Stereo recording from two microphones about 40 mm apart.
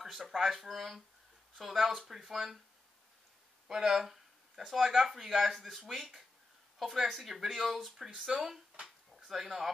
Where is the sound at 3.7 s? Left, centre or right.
Centre.